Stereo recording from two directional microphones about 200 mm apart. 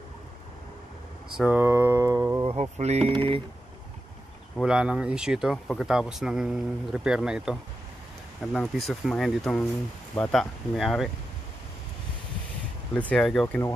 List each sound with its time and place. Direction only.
1.3 s mantra: 5° right (ahead or behind)
2.4 s speech: 30° right (ahead or behind)
4.6 s speech: 5° right (ahead or behind)
12.9 s speech: 5° left (ahead or behind)